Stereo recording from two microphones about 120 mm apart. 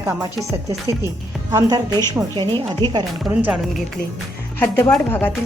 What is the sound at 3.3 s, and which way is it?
Speech, 10° right (ahead or behind).